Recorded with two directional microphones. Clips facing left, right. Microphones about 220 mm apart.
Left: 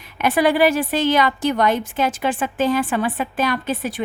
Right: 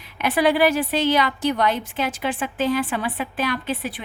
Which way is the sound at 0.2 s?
50° left (ahead or behind).